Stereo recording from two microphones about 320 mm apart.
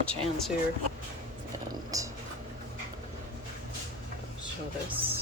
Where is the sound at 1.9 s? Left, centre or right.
Centre.